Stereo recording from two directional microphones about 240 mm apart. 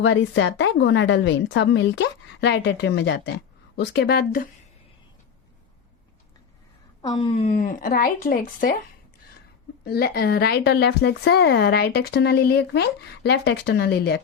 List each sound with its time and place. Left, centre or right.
0.0 s a woman's voice: left
7.0 s speech: centre; by 8.7 s left
9.8 s speech: left